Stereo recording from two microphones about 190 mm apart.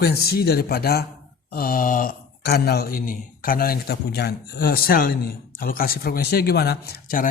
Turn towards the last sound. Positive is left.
turn(degrees=55)  # may be behind; listen again after turning